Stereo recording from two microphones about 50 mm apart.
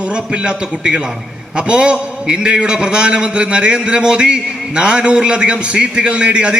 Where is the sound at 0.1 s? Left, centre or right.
Centre.